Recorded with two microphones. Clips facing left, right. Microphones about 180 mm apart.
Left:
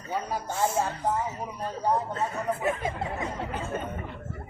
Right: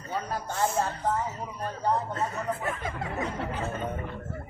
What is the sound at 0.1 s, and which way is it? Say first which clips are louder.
A man's voice: left 1 dB; 10° left (ahead or behind).